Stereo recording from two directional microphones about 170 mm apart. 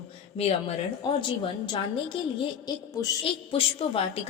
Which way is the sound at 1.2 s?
30° left (ahead or behind).